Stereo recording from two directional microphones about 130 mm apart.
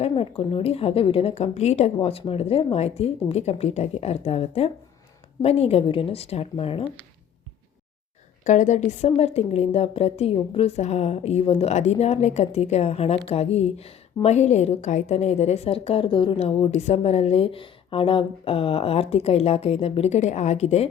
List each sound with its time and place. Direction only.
0.0 s speech: 45° left (ahead or behind)
2.0 s speech: 50° left (ahead or behind)
8.4 s a woman's voice: 70° left (ahead or behind)